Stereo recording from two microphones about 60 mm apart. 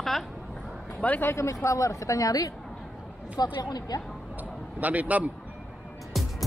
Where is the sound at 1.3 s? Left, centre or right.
Left.